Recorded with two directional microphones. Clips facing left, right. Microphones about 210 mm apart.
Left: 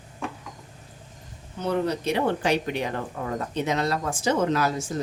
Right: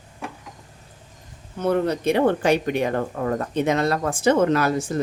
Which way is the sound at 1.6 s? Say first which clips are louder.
Right 4 dB; 55° right (ahead or behind).